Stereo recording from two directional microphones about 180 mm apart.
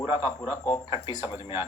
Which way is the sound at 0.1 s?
25° left (ahead or behind).